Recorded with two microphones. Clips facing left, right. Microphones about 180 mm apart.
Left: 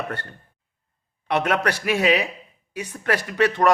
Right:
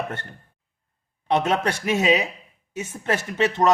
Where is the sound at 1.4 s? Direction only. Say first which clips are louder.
Even; 25° right (ahead or behind).